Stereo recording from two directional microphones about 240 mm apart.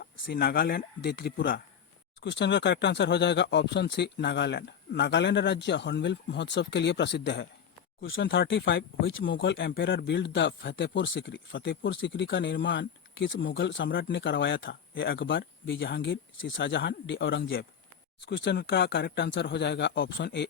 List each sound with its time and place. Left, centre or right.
0.0 s speech: left